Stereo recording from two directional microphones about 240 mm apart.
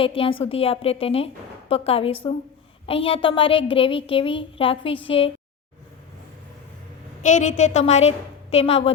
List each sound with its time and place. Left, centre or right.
0.0 s a child's voice: left
7.2 s a child's voice: left